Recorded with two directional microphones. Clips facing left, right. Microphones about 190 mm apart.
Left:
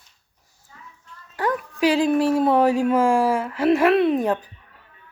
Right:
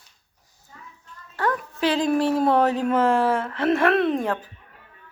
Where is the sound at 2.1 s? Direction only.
5° left (ahead or behind).